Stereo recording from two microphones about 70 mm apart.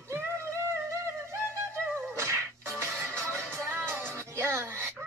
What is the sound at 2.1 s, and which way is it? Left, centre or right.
Music, right.